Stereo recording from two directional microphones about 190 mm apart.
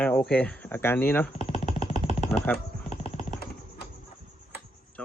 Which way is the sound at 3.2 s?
40° left (ahead or behind).